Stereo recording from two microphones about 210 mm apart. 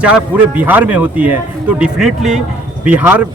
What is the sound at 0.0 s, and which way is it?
A man's voice, 5° right (ahead or behind).